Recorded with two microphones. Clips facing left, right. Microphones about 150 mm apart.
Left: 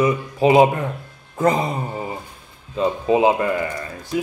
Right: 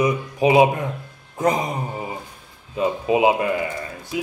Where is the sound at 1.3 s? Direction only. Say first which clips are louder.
Left 2 dB; 15° right (ahead or behind).